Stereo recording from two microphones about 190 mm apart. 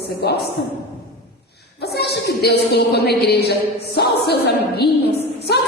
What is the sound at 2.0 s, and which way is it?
A woman's voice, 60° left (ahead or behind).